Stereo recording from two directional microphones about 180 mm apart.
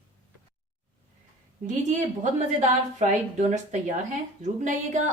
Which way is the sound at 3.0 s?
40° right (ahead or behind).